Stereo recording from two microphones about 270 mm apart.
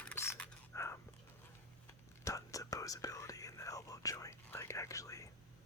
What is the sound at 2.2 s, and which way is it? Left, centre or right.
Speech, centre.